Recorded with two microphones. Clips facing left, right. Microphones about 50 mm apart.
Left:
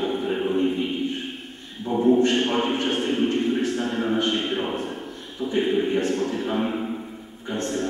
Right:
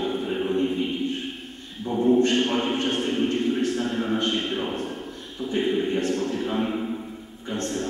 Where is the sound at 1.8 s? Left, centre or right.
Centre.